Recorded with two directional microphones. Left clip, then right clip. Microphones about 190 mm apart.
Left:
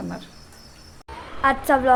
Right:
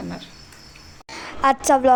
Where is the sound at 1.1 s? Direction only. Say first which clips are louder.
Right 2 dB; 35° right (ahead or behind).